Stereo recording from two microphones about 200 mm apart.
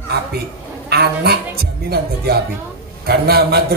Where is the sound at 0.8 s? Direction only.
50° right (ahead or behind).